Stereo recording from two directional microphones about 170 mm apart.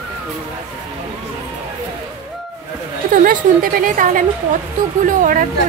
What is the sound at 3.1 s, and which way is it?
A woman's voice, 55° right (ahead or behind).